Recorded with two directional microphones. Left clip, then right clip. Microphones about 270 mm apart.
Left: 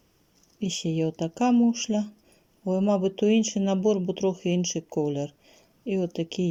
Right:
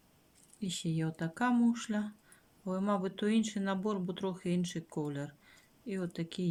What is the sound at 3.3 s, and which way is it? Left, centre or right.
Speech, right.